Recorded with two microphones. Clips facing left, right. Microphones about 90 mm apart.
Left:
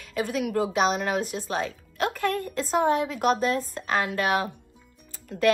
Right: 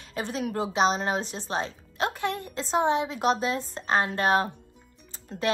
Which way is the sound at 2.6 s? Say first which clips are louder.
Left 1 dB; 30° right (ahead or behind).